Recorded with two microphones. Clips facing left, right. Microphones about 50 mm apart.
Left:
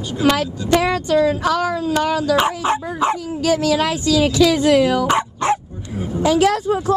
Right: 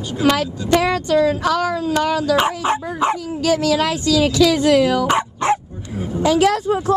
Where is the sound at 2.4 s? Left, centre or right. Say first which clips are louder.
Even; right.